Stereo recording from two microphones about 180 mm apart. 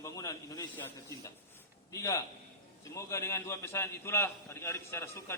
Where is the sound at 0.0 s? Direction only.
20° left (ahead or behind).